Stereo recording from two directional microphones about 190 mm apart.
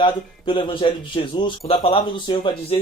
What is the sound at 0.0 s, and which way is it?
Speech, 25° left (ahead or behind).